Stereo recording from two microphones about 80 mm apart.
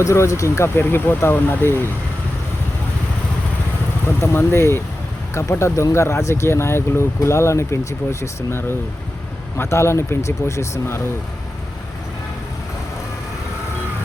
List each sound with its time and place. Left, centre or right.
0.0 s speech: left
4.2 s speech: left